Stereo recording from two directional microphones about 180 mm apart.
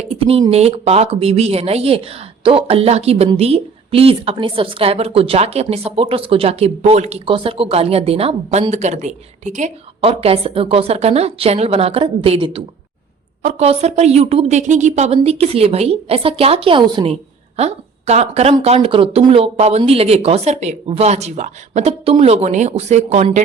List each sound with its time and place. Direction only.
0.0 s a sound: 35° right (ahead or behind)
0.5 s a woman's voice: 35° right (ahead or behind)
17.6 s a woman's voice: 35° right (ahead or behind)